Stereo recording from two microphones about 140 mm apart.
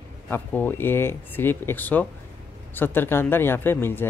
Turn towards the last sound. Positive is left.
turn(degrees=15)  # may be behind; listen again after turning